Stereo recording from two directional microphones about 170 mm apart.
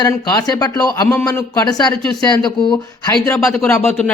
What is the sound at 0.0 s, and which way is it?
A man's voice, 20° left (ahead or behind).